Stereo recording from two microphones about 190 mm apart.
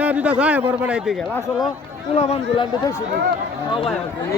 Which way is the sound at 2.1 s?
30° left (ahead or behind).